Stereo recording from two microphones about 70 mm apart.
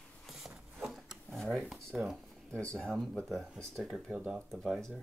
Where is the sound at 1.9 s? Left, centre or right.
Centre.